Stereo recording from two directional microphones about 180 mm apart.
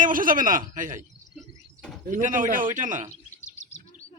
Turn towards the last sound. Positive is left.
turn(degrees=40)  # may be behind; listen again after turning